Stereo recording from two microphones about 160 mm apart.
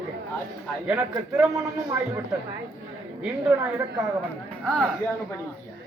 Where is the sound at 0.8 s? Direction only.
5° right (ahead or behind).